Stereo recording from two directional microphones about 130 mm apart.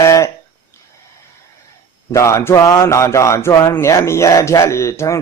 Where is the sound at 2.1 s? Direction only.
20° left (ahead or behind).